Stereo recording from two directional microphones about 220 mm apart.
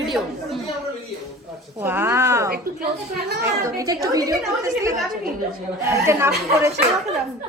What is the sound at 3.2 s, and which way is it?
Speech, 45° right (ahead or behind).